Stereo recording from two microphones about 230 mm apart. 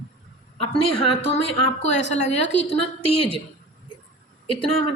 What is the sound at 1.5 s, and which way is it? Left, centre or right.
A woman's voice, left.